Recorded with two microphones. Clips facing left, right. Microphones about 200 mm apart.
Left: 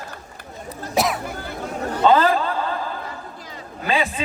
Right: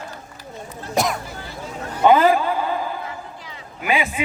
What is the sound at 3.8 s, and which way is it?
Speech, 15° right (ahead or behind).